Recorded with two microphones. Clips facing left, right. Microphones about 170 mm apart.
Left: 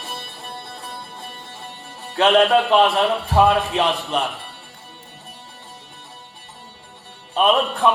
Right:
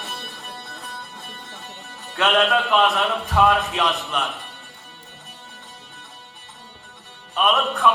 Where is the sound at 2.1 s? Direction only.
30° left (ahead or behind).